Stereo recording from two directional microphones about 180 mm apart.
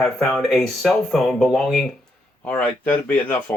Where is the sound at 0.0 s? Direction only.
Centre (ahead or behind).